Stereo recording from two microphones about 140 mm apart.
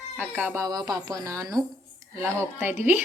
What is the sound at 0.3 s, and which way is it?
A woman's voice, 15° right (ahead or behind).